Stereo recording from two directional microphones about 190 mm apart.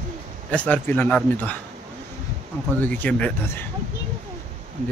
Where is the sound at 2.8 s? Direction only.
10° left (ahead or behind).